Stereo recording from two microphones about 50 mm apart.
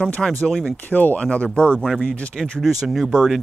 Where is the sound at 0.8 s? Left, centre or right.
Left.